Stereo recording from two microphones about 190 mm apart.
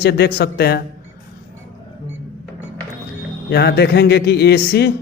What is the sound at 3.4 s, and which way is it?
A man's voice, 60° left (ahead or behind).